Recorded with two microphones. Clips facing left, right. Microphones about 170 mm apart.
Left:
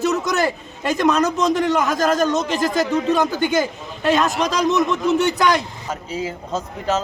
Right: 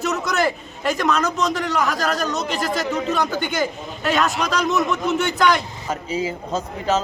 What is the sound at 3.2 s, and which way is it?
Speech, 15° left (ahead or behind).